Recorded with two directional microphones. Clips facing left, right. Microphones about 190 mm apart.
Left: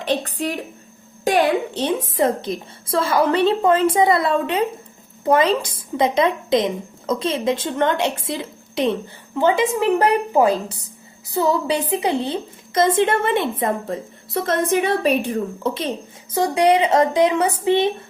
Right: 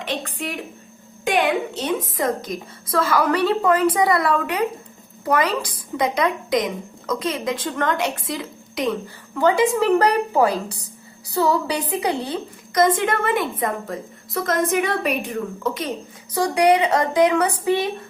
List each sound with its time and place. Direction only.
0.0 s a woman's voice: 35° left (ahead or behind)